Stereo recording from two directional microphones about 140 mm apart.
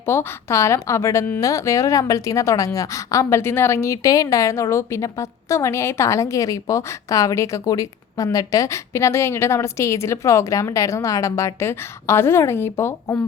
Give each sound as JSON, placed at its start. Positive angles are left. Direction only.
{"t": 0.0, "sound": "a woman's voice", "side_deg": 15}